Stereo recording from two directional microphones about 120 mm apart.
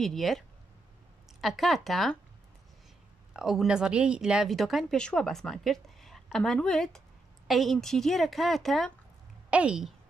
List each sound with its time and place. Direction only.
0.0 s speech: centre (ahead or behind)
1.4 s speech: centre (ahead or behind)
3.3 s speech: 5° right (ahead or behind)
9.5 s a woman's voice: 10° right (ahead or behind)